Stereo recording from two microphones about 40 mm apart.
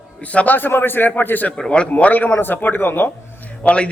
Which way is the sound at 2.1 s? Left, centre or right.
Left.